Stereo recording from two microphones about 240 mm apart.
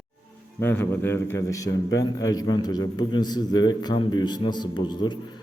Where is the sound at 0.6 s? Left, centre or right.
Centre.